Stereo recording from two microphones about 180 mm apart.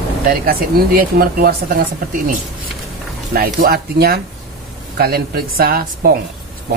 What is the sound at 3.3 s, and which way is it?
Speech, 55° right (ahead or behind).